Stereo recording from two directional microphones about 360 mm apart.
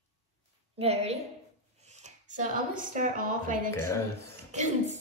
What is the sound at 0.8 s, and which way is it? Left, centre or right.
A woman's voice, centre.